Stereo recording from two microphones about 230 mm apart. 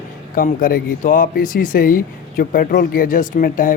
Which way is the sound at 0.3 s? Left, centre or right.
Left.